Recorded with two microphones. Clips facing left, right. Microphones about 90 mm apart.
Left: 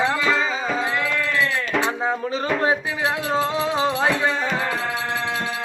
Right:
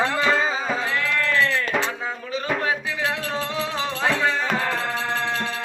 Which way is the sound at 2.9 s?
20° left (ahead or behind).